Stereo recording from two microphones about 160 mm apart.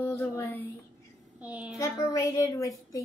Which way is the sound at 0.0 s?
15° left (ahead or behind).